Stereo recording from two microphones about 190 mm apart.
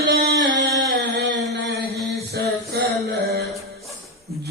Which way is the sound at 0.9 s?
85° right.